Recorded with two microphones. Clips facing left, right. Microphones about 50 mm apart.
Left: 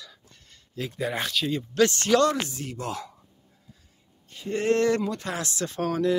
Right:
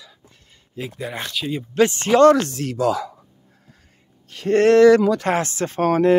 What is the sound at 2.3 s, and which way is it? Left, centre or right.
Speech, right.